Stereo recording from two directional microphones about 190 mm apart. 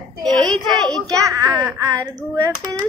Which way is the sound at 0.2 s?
Centre (ahead or behind).